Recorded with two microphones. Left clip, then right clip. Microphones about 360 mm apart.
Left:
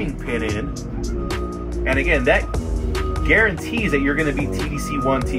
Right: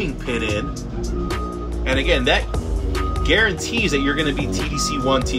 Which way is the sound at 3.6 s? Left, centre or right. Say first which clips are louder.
Right 1 dB; centre.